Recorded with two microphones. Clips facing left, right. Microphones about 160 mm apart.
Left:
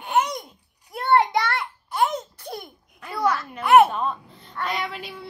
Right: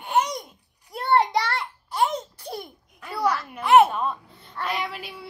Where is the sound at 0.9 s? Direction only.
30° right (ahead or behind).